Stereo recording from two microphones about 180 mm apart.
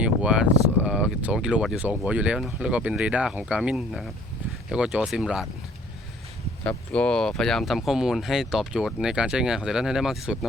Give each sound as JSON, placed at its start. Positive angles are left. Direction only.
{"t": 0.0, "sound": "speech", "side_deg": -5}
{"t": 6.7, "sound": "speech", "side_deg": 5}